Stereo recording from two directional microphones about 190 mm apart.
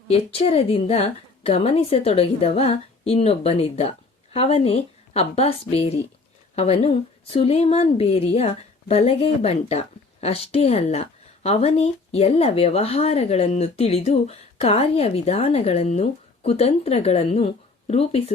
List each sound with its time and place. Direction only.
0.1 s speech: 30° left (ahead or behind)